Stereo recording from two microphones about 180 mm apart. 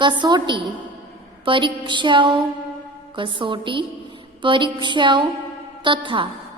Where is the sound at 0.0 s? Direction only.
25° right (ahead or behind).